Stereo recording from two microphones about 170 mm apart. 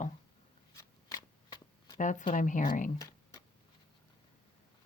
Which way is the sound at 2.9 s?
20° left (ahead or behind).